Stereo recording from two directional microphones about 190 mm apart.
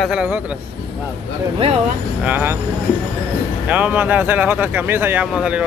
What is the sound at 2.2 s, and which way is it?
Speech, 10° right (ahead or behind).